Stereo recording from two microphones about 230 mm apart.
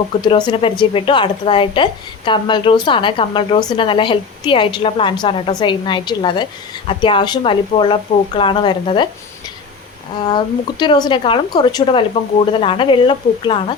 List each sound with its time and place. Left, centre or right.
0.2 s a woman's voice: centre
10.2 s a woman's voice: centre